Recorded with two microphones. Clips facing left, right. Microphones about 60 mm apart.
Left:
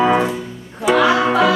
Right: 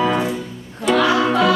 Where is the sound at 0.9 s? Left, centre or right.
Centre.